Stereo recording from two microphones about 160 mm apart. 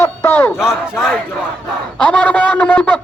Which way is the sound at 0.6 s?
5° right (ahead or behind).